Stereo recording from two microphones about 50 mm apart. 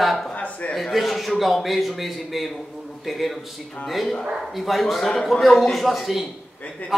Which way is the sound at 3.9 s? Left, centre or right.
Centre.